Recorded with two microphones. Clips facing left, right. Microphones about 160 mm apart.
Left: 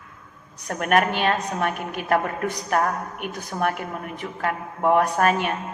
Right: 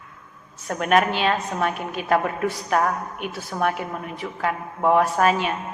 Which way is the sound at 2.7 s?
50° left (ahead or behind).